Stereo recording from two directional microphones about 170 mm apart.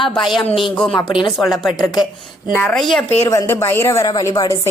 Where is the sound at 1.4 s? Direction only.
Centre (ahead or behind).